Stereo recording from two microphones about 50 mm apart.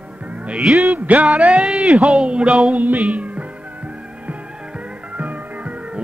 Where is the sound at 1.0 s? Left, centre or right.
Right.